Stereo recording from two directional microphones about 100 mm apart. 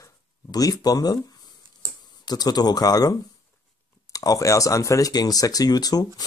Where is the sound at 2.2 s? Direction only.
40° left (ahead or behind).